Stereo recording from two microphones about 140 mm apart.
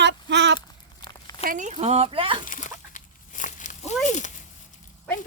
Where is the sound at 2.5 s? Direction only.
65° left (ahead or behind).